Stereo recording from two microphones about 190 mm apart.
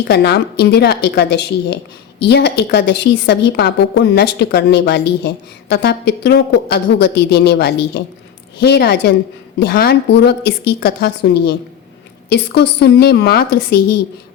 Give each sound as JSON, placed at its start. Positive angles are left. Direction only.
{"t": 0.1, "sound": "a woman's voice", "side_deg": 60}